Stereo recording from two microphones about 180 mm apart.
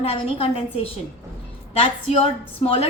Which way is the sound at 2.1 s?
30° left (ahead or behind).